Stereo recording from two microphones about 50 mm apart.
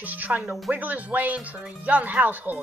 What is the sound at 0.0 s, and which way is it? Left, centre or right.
Speech, right.